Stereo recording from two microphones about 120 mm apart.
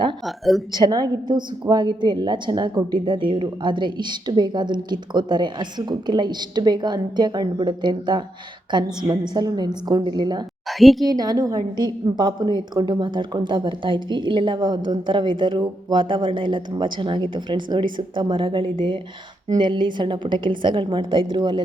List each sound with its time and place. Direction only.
0.3 s a woman's voice: centre (ahead or behind)
0.7 s a woman's voice: 35° right (ahead or behind)
10.7 s a woman's voice: centre (ahead or behind)
11.0 s a woman's voice: 30° right (ahead or behind)